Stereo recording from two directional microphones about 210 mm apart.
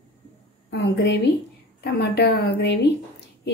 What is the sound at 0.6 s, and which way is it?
A woman's voice, 55° left (ahead or behind).